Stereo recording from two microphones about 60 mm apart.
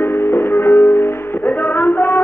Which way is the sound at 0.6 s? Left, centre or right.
Left.